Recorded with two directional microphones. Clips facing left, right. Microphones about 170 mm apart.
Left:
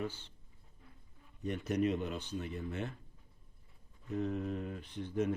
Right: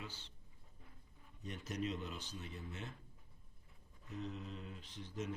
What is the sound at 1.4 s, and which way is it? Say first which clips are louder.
Speech: left 10 dB; 60° left (ahead or behind).